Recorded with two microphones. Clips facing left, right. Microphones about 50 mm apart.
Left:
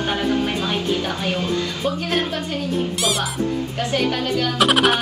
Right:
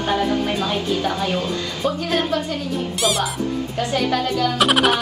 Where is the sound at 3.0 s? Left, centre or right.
Centre.